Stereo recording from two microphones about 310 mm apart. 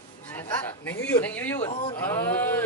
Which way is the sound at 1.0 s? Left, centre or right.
Centre.